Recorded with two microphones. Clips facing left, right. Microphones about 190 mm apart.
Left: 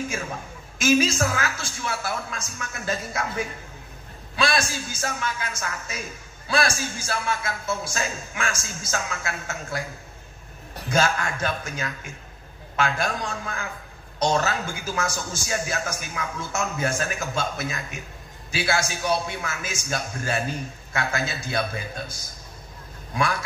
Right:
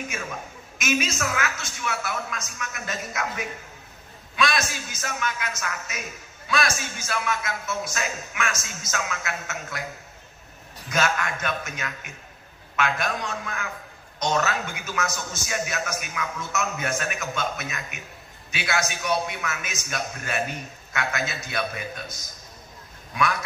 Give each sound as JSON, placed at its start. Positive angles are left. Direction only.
{"t": 0.1, "sound": "a man's voice", "side_deg": 30}
{"t": 10.9, "sound": "a man's voice", "side_deg": 30}